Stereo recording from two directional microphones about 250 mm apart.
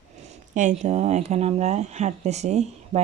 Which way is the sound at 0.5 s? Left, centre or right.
Right.